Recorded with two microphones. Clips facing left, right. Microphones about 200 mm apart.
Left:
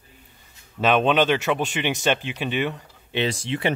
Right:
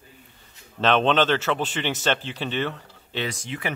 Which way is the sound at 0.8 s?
10° left (ahead or behind).